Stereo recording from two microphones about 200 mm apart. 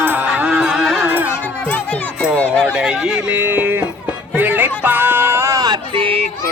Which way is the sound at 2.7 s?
5° right (ahead or behind).